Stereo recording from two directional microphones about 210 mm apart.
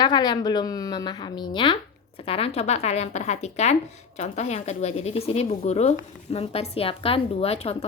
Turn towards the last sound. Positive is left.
turn(degrees=30)  # may be behind; listen again after turning